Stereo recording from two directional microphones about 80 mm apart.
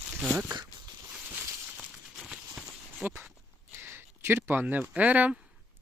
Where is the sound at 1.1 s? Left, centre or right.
Right.